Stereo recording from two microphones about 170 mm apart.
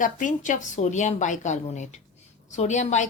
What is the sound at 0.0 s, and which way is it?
Speech, 50° left (ahead or behind).